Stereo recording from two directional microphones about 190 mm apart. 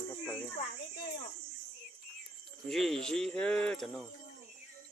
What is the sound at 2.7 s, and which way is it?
Speech, centre (ahead or behind).